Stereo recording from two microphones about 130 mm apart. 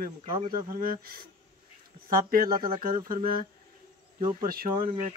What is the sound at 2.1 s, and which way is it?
Speech, 90° right.